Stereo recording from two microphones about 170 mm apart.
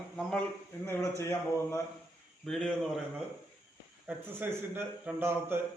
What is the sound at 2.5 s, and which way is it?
Speech, centre (ahead or behind).